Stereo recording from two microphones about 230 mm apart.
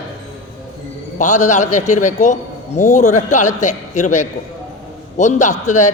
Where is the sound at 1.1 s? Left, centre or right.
Left.